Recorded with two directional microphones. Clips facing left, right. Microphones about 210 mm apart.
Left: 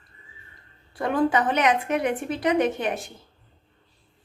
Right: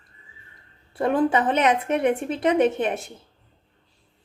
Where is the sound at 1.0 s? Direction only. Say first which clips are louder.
Right 2 dB; 25° right (ahead or behind).